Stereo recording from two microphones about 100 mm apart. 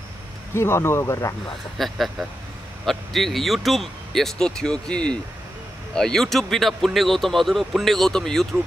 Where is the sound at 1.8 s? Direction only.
Centre (ahead or behind).